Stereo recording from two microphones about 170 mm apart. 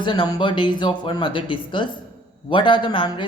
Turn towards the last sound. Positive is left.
turn(degrees=25)  # may be behind; listen again after turning